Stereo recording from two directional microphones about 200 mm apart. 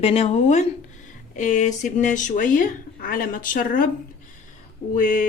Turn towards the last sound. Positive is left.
turn(degrees=40)  # may be behind; listen again after turning